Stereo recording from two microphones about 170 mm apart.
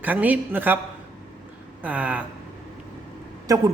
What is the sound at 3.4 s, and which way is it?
Speech, 20° right (ahead or behind).